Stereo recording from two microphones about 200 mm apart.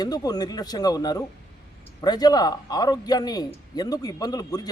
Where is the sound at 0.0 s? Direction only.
20° left (ahead or behind).